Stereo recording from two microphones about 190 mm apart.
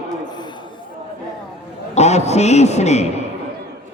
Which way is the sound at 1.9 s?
35° left (ahead or behind).